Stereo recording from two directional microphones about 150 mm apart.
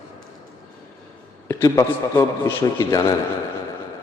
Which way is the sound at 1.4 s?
20° left (ahead or behind).